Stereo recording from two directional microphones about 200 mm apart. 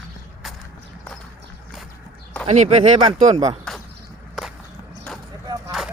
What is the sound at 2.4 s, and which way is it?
Speech, 35° right (ahead or behind).